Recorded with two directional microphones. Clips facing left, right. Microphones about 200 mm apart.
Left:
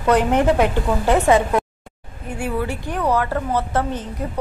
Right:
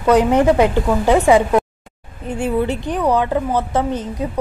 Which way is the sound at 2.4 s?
20° right (ahead or behind).